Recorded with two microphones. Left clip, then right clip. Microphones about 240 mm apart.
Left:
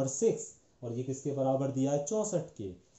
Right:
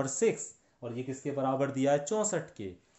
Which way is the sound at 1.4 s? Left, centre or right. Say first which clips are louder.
Right 1 dB; right.